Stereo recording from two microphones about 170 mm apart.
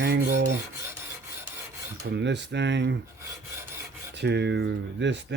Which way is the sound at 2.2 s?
90° right.